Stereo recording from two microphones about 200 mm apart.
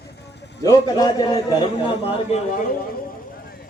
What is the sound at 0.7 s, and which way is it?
Speech, 15° left (ahead or behind).